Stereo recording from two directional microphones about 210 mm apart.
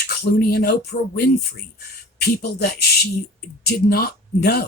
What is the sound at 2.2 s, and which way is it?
Speech, 50° left (ahead or behind).